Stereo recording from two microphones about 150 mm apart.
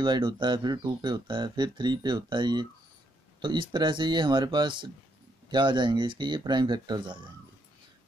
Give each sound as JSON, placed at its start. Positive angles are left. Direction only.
{"t": 0.0, "sound": "speech", "side_deg": -30}